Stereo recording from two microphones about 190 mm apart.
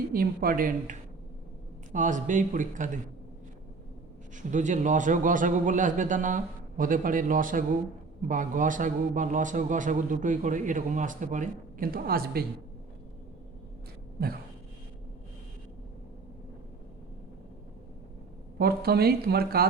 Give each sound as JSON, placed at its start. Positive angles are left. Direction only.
{"t": 0.1, "sound": "a man's voice", "side_deg": -50}
{"t": 4.4, "sound": "a man's voice", "side_deg": -40}
{"t": 18.6, "sound": "speech", "side_deg": -55}